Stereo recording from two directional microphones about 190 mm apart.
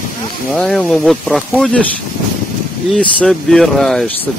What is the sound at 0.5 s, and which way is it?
Speech, 5° left (ahead or behind).